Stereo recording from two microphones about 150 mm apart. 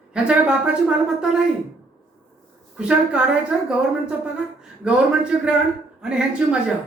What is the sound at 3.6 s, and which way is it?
A woman's voice, 5° right (ahead or behind).